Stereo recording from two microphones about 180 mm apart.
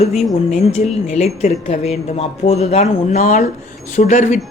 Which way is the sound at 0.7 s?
35° left (ahead or behind).